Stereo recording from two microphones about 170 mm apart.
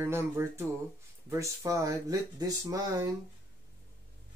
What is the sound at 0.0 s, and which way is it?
Speech, 15° right (ahead or behind).